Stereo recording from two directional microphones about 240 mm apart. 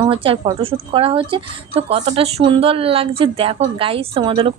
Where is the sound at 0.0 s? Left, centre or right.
Right.